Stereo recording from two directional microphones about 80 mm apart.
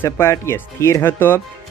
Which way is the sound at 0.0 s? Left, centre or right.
Left.